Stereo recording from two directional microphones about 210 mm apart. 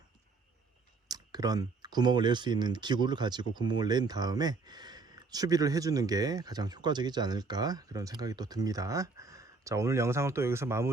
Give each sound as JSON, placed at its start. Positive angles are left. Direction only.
{"t": 1.0, "sound": "speech", "side_deg": -20}